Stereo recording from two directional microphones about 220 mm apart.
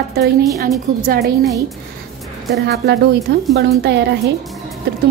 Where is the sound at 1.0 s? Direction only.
45° right (ahead or behind).